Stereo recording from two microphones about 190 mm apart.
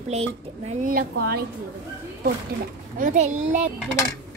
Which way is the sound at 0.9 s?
55° right (ahead or behind).